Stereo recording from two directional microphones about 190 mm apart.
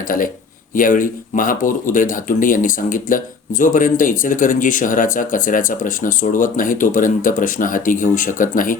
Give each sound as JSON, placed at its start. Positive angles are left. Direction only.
{"t": 0.8, "sound": "speech", "side_deg": 45}